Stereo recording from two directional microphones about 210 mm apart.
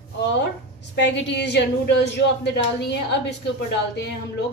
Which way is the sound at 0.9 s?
60° left (ahead or behind).